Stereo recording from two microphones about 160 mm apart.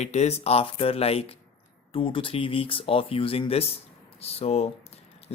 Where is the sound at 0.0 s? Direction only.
45° left (ahead or behind).